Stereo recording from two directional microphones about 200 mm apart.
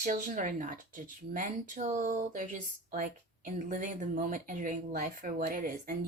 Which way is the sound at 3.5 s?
40° right (ahead or behind).